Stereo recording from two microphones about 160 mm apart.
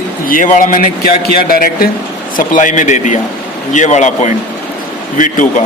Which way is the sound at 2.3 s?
55° left (ahead or behind).